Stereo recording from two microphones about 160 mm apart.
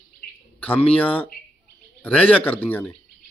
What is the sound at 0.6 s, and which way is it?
A man's voice, 10° left (ahead or behind).